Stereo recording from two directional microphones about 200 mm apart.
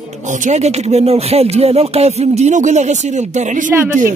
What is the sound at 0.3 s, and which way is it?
Speech, 35° right (ahead or behind).